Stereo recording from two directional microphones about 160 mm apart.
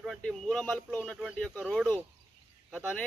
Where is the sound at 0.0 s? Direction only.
Centre (ahead or behind).